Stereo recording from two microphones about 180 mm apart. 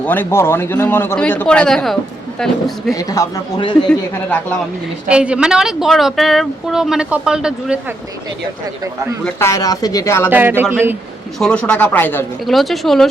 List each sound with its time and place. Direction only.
0.0 s a man's voice: 10° left (ahead or behind)
2.9 s speech: 20° left (ahead or behind)
3.8 s a man's voice: 10° left (ahead or behind)
5.0 s speech: 5° right (ahead or behind)
9.2 s speech: 15° left (ahead or behind)
10.2 s speech: 10° right (ahead or behind)
11.3 s a man's voice: 5° left (ahead or behind)
12.5 s speech: centre (ahead or behind)